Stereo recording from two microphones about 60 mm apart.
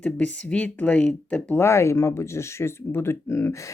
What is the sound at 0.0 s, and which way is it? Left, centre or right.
Speech, left.